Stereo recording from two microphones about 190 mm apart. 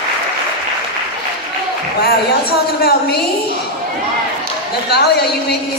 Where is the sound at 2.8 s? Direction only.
55° left (ahead or behind).